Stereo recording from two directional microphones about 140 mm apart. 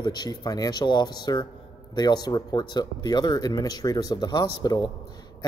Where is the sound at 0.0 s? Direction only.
30° left (ahead or behind).